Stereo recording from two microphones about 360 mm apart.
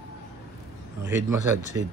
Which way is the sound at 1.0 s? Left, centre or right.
Centre.